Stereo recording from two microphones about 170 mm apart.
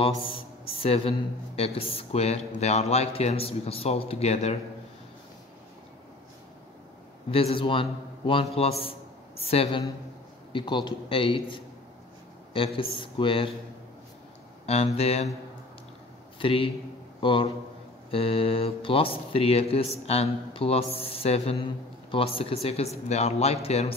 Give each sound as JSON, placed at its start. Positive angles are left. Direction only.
{"t": 0.1, "sound": "speech", "side_deg": 30}
{"t": 7.2, "sound": "a man's voice", "side_deg": 30}
{"t": 14.7, "sound": "speech", "side_deg": 40}
{"t": 16.3, "sound": "a man's voice", "side_deg": 30}